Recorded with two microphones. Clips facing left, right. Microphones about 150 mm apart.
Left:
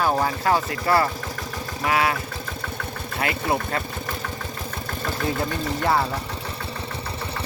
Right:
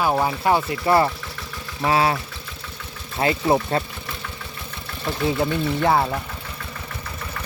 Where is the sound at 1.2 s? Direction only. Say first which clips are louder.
Left 4 dB; 45° left (ahead or behind).